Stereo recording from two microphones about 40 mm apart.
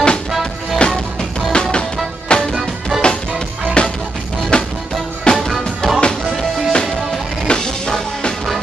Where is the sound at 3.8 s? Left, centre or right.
Left.